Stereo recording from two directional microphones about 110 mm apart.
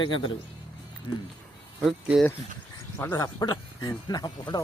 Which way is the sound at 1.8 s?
Centre (ahead or behind).